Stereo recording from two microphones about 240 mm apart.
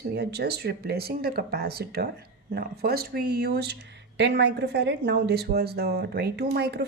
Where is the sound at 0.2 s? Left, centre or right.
Right.